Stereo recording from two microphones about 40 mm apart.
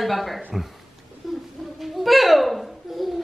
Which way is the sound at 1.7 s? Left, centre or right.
Centre.